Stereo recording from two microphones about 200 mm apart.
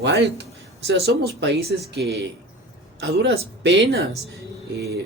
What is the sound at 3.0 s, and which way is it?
Speech, 60° right (ahead or behind).